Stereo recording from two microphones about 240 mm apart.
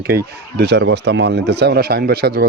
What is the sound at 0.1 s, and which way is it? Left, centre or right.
Speech, right.